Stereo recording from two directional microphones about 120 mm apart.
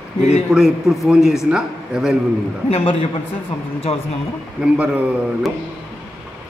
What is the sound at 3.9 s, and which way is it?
Speech, 65° left (ahead or behind).